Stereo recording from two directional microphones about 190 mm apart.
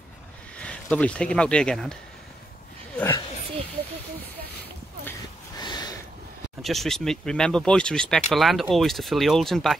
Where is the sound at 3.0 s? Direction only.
10° left (ahead or behind).